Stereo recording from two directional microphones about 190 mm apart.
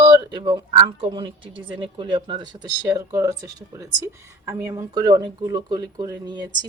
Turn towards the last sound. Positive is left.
turn(degrees=-20)  # may be behind; listen again after turning